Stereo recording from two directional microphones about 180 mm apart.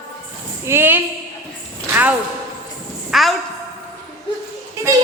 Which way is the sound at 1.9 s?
10° right (ahead or behind).